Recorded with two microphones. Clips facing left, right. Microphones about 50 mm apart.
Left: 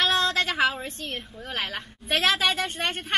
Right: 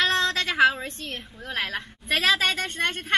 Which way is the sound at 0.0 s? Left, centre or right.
Centre.